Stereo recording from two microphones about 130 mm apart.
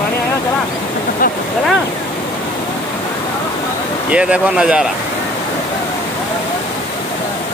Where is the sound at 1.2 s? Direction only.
90° left.